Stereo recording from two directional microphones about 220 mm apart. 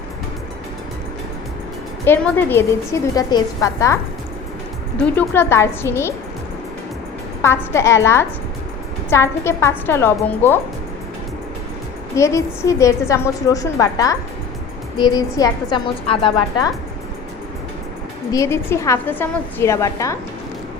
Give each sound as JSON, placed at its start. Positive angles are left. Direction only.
{"t": 2.0, "sound": "a woman's voice", "side_deg": 10}
{"t": 5.1, "sound": "a woman's voice", "side_deg": 10}
{"t": 7.4, "sound": "a woman's voice", "side_deg": 10}
{"t": 12.1, "sound": "a woman's voice", "side_deg": 15}
{"t": 18.3, "sound": "a woman's voice", "side_deg": 15}